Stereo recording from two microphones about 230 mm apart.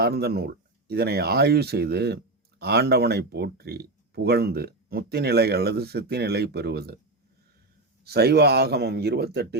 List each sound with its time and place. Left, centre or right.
0.0 s speech: right
8.0 s speech: right